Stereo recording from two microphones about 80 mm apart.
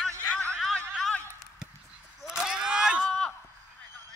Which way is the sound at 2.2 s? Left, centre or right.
Centre.